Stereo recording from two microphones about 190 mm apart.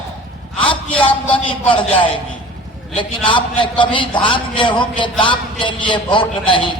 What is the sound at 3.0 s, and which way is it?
A man's voice, 25° left (ahead or behind).